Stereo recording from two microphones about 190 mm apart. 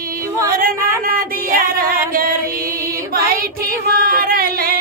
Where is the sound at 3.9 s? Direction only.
50° right (ahead or behind).